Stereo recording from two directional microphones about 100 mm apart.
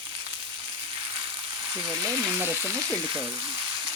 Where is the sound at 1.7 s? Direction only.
35° right (ahead or behind).